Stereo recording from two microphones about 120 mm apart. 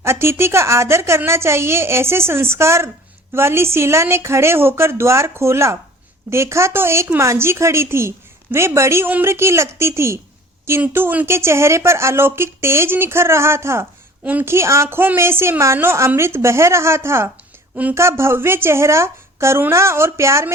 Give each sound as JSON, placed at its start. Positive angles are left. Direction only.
{"t": 0.0, "sound": "speech", "side_deg": -20}